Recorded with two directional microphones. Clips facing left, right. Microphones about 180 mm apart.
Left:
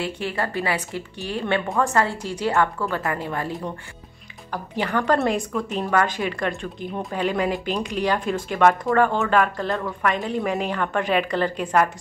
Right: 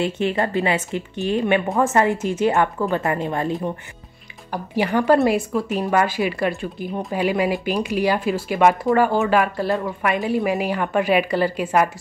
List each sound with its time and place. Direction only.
0.0 s speech: 25° right (ahead or behind)
4.5 s a woman's voice: 10° right (ahead or behind)